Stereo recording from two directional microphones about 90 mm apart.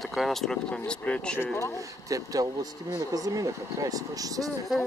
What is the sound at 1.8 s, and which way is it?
Speech, 40° right (ahead or behind).